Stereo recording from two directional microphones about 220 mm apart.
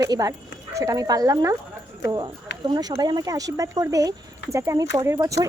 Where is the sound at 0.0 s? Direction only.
15° right (ahead or behind).